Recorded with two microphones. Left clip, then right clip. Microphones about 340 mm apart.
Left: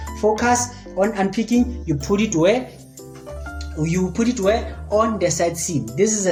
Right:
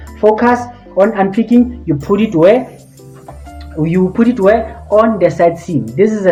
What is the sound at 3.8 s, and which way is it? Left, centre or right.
Speech, right.